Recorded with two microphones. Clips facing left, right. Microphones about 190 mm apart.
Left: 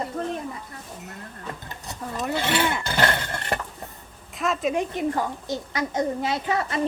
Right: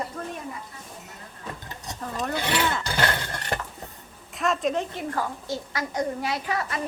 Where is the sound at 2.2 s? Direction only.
5° left (ahead or behind).